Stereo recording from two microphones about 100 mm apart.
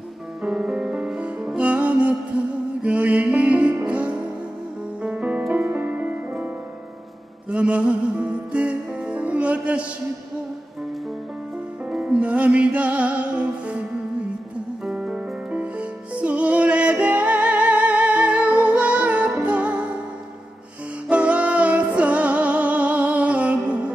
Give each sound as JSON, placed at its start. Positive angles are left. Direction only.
{"t": 0.4, "sound": "music", "side_deg": -10}
{"t": 11.9, "sound": "music", "side_deg": -10}
{"t": 14.9, "sound": "music", "side_deg": -10}
{"t": 21.1, "sound": "music", "side_deg": -15}